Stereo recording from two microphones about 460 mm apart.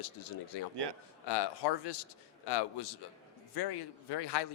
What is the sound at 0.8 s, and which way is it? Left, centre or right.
Speech, right.